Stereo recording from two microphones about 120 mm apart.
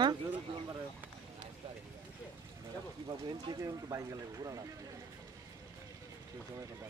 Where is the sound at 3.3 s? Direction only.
35° right (ahead or behind).